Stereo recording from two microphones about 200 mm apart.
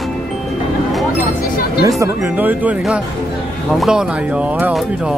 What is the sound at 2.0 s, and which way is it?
Speech, 10° right (ahead or behind).